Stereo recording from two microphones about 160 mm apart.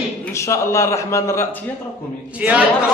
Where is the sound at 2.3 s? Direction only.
10° right (ahead or behind).